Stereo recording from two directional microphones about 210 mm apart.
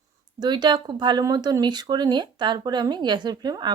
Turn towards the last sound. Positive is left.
turn(degrees=-20)  # may be behind; listen again after turning